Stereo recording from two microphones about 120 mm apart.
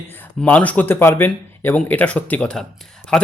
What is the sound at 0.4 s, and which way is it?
Speech, 15° left (ahead or behind).